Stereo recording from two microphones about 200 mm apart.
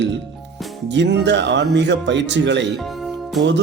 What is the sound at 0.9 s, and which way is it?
Speech, 60° right (ahead or behind).